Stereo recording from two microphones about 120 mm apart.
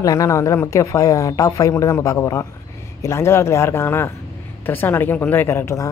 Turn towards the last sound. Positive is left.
turn(degrees=25)  # may be behind; listen again after turning